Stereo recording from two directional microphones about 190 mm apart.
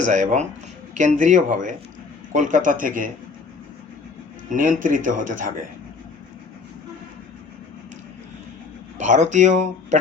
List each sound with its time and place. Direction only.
0.0 s speech: 40° right (ahead or behind)
4.4 s speech: 45° right (ahead or behind)
9.0 s speech: 40° right (ahead or behind)